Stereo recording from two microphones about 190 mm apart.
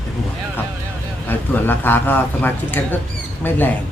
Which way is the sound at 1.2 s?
10° left (ahead or behind).